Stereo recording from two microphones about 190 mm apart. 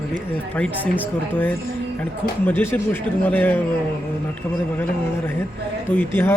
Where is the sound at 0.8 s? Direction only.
10° right (ahead or behind).